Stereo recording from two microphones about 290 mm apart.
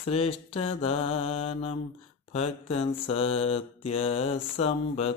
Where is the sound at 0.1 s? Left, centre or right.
Centre.